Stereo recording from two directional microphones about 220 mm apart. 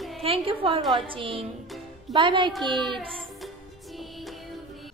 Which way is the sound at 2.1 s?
20° right (ahead or behind).